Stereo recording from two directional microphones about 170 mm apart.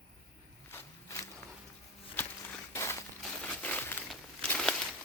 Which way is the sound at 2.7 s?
15° left (ahead or behind).